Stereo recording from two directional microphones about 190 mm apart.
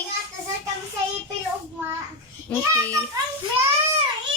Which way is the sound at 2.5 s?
10° left (ahead or behind).